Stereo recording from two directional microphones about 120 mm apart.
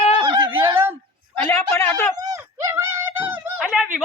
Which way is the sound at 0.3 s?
40° right (ahead or behind).